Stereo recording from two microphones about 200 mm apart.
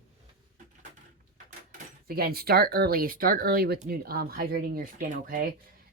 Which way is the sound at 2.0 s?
50° right (ahead or behind).